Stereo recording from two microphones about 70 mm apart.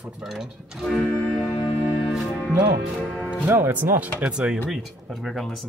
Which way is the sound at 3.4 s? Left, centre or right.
Right.